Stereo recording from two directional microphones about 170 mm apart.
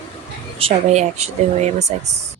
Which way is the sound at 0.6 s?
40° right (ahead or behind).